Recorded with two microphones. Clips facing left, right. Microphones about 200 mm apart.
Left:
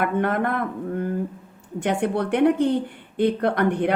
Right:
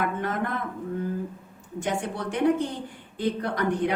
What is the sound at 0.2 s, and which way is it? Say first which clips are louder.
A woman's voice: left 6 dB; 60° left (ahead or behind).